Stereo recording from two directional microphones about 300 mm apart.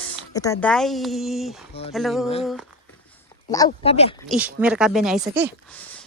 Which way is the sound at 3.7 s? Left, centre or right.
Left.